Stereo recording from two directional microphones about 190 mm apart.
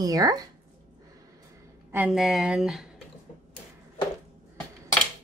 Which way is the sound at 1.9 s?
5° right (ahead or behind).